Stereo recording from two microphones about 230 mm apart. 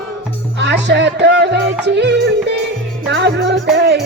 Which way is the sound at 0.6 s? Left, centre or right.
Right.